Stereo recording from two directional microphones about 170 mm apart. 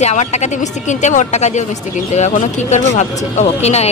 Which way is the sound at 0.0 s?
40° left (ahead or behind).